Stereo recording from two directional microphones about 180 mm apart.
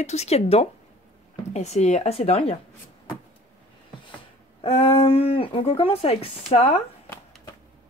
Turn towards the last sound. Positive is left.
turn(degrees=35)  # may be behind; listen again after turning